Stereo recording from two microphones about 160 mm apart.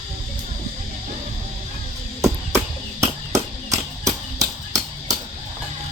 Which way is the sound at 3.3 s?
20° right (ahead or behind).